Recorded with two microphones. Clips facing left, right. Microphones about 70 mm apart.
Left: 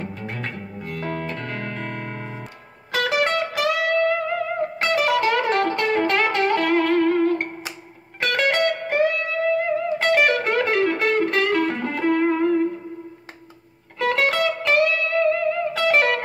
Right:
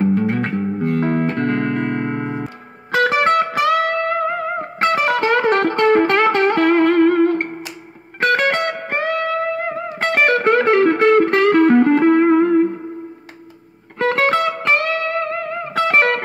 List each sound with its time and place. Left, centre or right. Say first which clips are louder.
0.0 s music: right 13 dB; right
13.9 s music: right 4 dB; right